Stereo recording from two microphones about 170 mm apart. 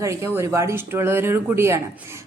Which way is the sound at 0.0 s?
20° right (ahead or behind).